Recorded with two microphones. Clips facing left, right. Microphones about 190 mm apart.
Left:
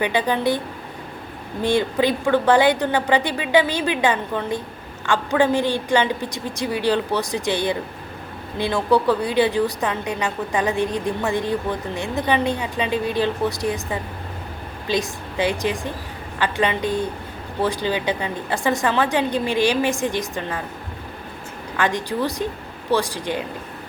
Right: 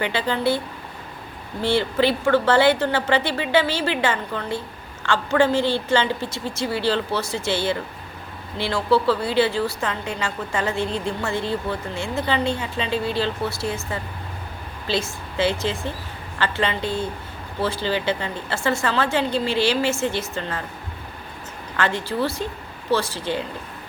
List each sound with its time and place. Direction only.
0.0 s a woman's voice: 15° left (ahead or behind)
1.6 s a woman's voice: 15° left (ahead or behind)
21.8 s a woman's voice: 15° left (ahead or behind)